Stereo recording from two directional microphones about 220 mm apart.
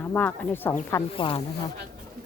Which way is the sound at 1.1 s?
25° left (ahead or behind).